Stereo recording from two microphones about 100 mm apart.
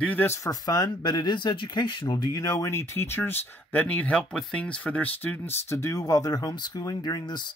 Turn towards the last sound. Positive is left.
turn(degrees=50)  # may be behind; listen again after turning